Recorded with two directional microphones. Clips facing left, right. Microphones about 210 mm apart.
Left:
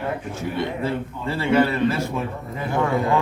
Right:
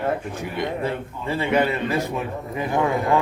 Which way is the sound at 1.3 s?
15° right (ahead or behind).